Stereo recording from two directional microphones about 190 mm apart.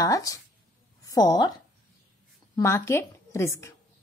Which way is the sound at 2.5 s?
15° left (ahead or behind).